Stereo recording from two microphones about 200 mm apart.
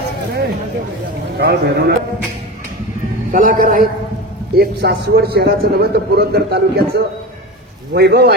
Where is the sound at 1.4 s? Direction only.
50° right (ahead or behind).